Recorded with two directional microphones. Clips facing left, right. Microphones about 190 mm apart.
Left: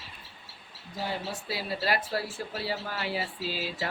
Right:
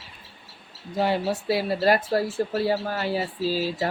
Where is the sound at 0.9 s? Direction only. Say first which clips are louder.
Right 10 dB; 65° right (ahead or behind).